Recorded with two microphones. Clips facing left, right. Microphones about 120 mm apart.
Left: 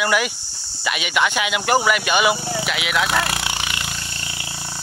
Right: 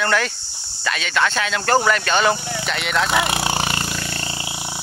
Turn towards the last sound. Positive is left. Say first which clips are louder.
# right 5 dB
turn(degrees=-45)  # may be behind; listen again after turning